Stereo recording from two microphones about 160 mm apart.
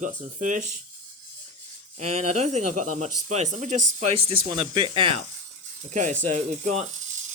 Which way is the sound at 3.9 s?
35° right (ahead or behind).